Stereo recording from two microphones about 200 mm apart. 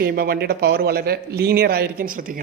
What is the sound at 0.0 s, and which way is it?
Speech, 50° right (ahead or behind).